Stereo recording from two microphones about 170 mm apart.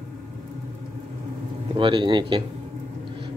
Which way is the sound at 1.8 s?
30° right (ahead or behind).